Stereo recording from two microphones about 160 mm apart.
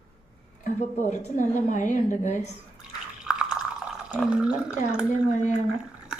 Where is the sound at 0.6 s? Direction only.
50° left (ahead or behind).